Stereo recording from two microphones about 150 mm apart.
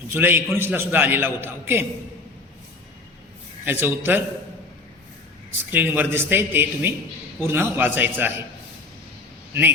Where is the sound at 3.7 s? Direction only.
15° right (ahead or behind).